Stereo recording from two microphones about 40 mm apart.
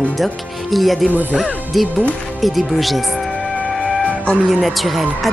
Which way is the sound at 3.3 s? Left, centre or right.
Left.